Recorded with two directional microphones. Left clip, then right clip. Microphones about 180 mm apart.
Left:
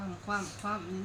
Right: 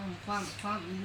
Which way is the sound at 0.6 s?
15° right (ahead or behind).